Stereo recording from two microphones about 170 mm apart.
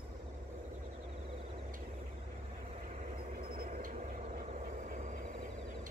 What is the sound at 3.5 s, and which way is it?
Vehicle, 60° right (ahead or behind).